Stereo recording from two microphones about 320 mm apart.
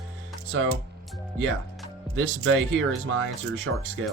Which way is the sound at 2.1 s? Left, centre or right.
Right.